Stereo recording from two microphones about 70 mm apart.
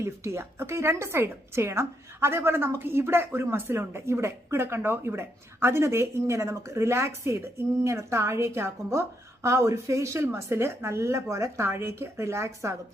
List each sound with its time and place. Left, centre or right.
0.0 s a woman's voice: right